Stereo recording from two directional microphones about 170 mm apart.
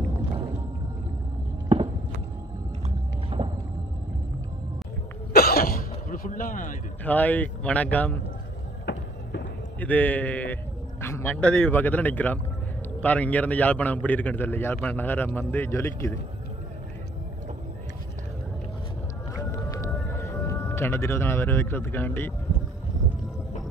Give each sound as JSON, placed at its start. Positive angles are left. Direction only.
{"t": 3.3, "sound": "a sound", "side_deg": -35}
{"t": 5.3, "sound": "throat clearing", "side_deg": 60}
{"t": 7.1, "sound": "a man's voice", "side_deg": 10}
{"t": 8.9, "sound": "music", "side_deg": 90}
{"t": 9.8, "sound": "a man's voice", "side_deg": 10}
{"t": 19.3, "sound": "whale vocalization", "side_deg": 20}